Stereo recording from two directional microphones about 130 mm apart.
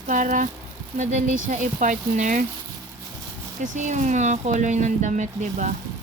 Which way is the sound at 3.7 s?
65° right (ahead or behind).